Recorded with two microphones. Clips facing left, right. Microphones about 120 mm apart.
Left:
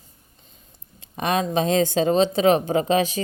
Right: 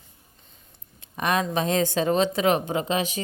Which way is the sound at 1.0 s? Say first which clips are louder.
Left 2 dB; 25° left (ahead or behind).